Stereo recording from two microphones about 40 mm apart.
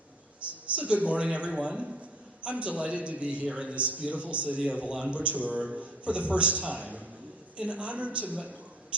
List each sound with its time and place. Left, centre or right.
0.7 s a man's voice: right
8.9 s whispering: right